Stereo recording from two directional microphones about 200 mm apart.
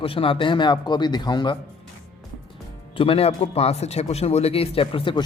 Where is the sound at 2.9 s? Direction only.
25° left (ahead or behind).